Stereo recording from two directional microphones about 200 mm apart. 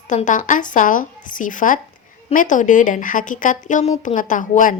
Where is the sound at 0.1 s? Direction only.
40° left (ahead or behind).